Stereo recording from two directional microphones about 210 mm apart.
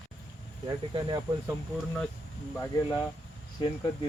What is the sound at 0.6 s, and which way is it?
Speech, 20° right (ahead or behind).